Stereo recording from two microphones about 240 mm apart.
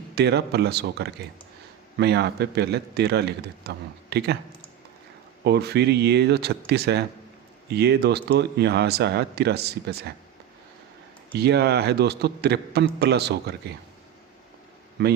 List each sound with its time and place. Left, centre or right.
0.2 s a man's voice: right
5.4 s a man's voice: right
11.3 s a man's voice: right